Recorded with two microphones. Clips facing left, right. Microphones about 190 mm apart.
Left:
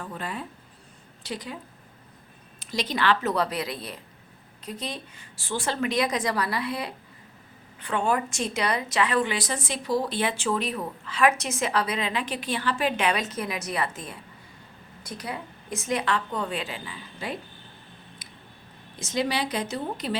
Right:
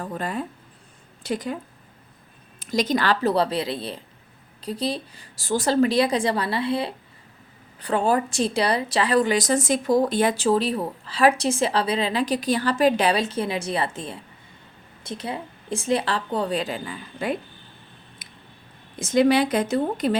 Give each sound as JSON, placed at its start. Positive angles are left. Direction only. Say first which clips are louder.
{"t": 0.0, "sound": "a woman's voice", "louder": "right 6 dB", "side_deg": -45}
{"t": 2.6, "sound": "a woman's voice", "louder": "right 6 dB", "side_deg": -45}
{"t": 18.2, "sound": "a sound", "louder": "left 1 dB", "side_deg": -55}
{"t": 18.9, "sound": "a woman's voice", "louder": "right 9 dB", "side_deg": -50}